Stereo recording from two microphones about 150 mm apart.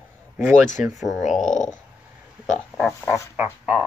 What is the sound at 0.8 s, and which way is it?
Speech, centre (ahead or behind).